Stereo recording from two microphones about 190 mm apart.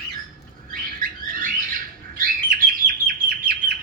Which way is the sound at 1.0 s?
45° right (ahead or behind).